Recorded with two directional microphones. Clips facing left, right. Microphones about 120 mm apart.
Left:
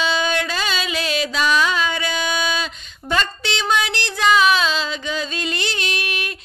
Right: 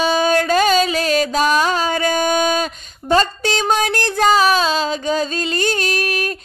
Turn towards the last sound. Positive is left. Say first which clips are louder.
# right 6 dB
turn(degrees=-40)  # may be behind; listen again after turning